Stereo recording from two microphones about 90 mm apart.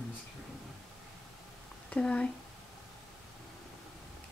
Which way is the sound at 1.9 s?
10° left (ahead or behind).